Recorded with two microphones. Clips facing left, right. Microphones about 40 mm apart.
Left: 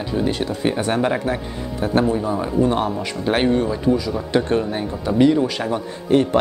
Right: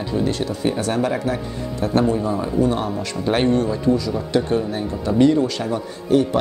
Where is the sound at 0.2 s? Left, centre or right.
Left.